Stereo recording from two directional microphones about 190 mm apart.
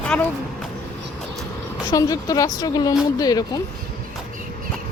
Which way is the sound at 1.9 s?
20° left (ahead or behind).